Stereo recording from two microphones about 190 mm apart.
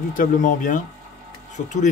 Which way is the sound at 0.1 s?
45° left (ahead or behind).